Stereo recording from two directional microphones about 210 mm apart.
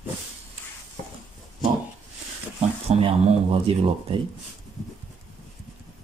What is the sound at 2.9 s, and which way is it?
Speech, 30° right (ahead or behind).